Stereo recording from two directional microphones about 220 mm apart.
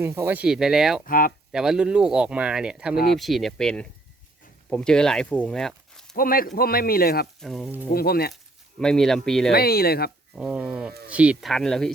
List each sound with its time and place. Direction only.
0.0 s speech: 10° right (ahead or behind)
1.0 s speech: 40° left (ahead or behind)
1.5 s speech: 5° right (ahead or behind)
2.9 s speech: 45° left (ahead or behind)
3.2 s speech: centre (ahead or behind)
6.1 s speech: 40° left (ahead or behind)
7.4 s speech: centre (ahead or behind)
7.9 s speech: 45° left (ahead or behind)
8.8 s speech: centre (ahead or behind)
9.5 s speech: 45° left (ahead or behind)
10.3 s speech: 5° right (ahead or behind)